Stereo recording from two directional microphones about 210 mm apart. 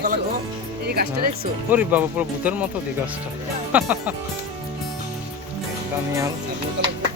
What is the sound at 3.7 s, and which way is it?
Speech, 5° right (ahead or behind).